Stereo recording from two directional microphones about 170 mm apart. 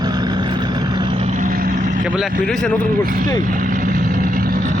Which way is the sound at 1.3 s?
55° right (ahead or behind).